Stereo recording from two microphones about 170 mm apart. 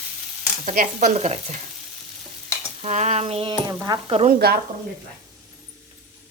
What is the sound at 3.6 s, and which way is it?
Stir, 20° right (ahead or behind).